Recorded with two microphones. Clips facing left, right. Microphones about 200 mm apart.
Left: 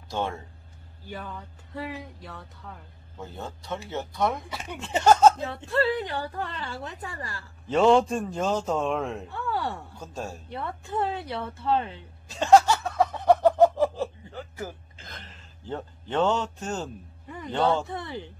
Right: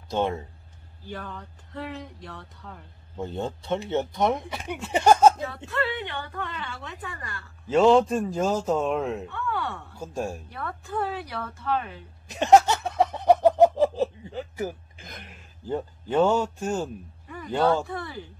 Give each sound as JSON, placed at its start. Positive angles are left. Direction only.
{"t": 0.1, "sound": "speech", "side_deg": -20}
{"t": 1.0, "sound": "speech", "side_deg": 10}
{"t": 3.2, "sound": "speech", "side_deg": -25}
{"t": 5.7, "sound": "a woman's voice", "side_deg": 35}
{"t": 7.6, "sound": "a man's voice", "side_deg": 0}
{"t": 9.3, "sound": "a woman's voice", "side_deg": 35}
{"t": 9.9, "sound": "speech", "side_deg": -15}
{"t": 10.5, "sound": "a woman's voice", "side_deg": 25}
{"t": 12.3, "sound": "a sound", "side_deg": -20}
{"t": 17.8, "sound": "a woman's voice", "side_deg": 20}